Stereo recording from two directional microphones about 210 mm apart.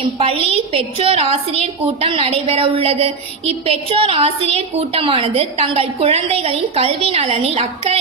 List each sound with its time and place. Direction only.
0.0 s a woman's voice: 30° right (ahead or behind)